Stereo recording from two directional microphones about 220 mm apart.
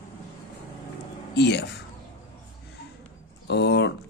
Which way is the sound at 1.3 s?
50° left (ahead or behind).